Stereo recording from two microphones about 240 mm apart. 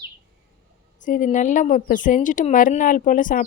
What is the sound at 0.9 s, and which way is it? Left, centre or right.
A woman's voice, left.